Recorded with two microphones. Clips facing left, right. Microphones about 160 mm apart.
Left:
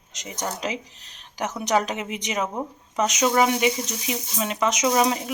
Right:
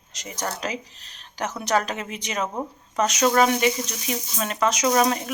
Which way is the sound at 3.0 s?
15° left (ahead or behind).